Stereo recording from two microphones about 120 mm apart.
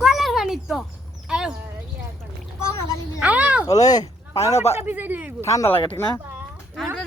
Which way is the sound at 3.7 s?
30° left (ahead or behind).